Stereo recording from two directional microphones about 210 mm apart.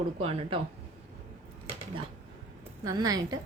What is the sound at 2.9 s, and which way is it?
Speech, 15° right (ahead or behind).